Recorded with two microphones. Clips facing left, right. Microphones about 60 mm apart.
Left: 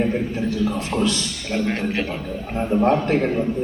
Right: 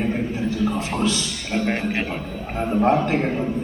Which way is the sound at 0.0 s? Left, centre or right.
Centre.